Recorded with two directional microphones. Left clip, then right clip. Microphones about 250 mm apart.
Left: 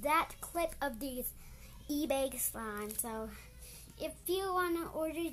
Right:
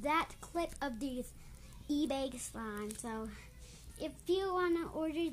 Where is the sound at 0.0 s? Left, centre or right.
Left.